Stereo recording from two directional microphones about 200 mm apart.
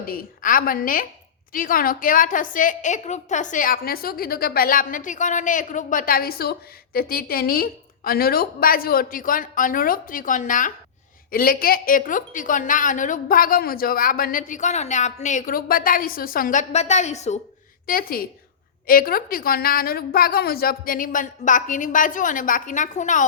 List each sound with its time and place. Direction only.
0.0 s a woman's voice: 45° left (ahead or behind)
17.8 s a woman's voice: 45° left (ahead or behind)